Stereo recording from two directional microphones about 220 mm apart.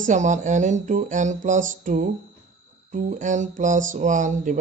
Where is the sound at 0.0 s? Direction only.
35° right (ahead or behind).